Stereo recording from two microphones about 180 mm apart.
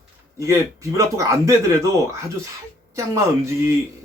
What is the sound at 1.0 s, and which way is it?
Speech, 15° right (ahead or behind).